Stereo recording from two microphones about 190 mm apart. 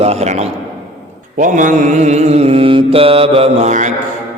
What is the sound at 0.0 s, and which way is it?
A man's voice, 35° right (ahead or behind).